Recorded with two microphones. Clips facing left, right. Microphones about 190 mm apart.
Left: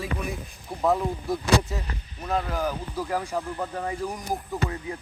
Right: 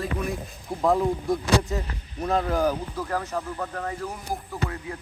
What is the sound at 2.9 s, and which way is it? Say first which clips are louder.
A man's voice: left 1 dB; 10° left (ahead or behind).